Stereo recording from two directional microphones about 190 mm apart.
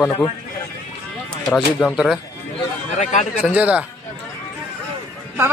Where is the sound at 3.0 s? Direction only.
40° left (ahead or behind).